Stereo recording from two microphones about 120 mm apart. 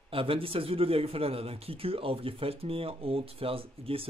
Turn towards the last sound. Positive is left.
turn(degrees=-50)  # may be behind; listen again after turning